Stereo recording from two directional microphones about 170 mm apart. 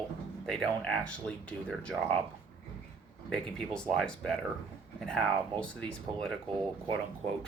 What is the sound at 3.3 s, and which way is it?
Speech, 5° left (ahead or behind).